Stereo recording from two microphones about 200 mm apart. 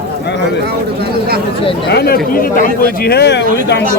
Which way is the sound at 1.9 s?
50° left (ahead or behind).